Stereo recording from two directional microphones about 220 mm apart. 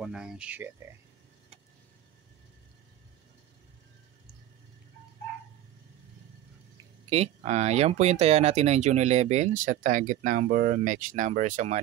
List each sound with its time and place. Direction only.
0.0 s speech: 5° right (ahead or behind)
7.1 s speech: 30° right (ahead or behind)